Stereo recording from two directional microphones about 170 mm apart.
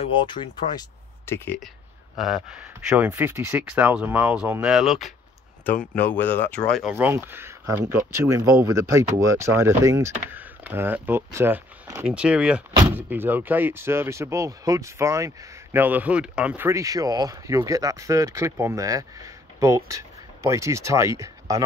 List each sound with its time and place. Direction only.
0.0 s speech: 30° left (ahead or behind)
1.2 s speech: 15° left (ahead or behind)
2.1 s speech: centre (ahead or behind)
5.7 s speech: 10° left (ahead or behind); by 21.6 s 20° right (ahead or behind)